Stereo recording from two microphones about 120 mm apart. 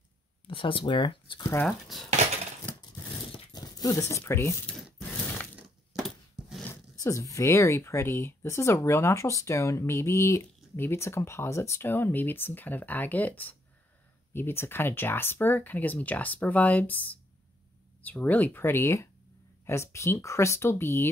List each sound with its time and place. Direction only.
0.5 s speech: 45° left (ahead or behind)
1.7 s speech: centre (ahead or behind)
3.5 s speech: 30° left (ahead or behind)
5.6 s a sound: centre (ahead or behind)
6.7 s speech: 25° left (ahead or behind)
18.2 s speech: 15° left (ahead or behind)